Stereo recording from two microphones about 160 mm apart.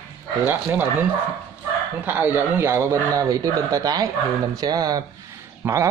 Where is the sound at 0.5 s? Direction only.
10° right (ahead or behind).